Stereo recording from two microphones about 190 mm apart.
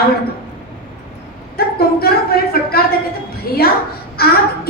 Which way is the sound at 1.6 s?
55° left (ahead or behind).